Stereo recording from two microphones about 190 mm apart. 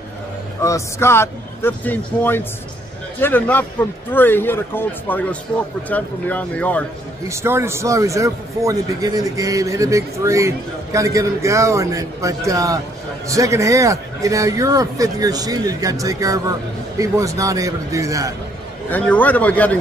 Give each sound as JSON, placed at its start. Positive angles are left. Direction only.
{"t": 0.6, "sound": "a man's voice", "side_deg": 15}
{"t": 7.2, "sound": "a man's voice", "side_deg": -15}
{"t": 18.9, "sound": "a man's voice", "side_deg": 10}